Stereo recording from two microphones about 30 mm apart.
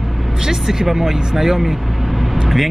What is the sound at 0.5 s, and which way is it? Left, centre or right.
Speech, centre.